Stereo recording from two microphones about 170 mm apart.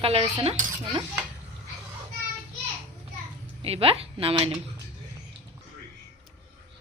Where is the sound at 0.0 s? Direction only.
35° right (ahead or behind).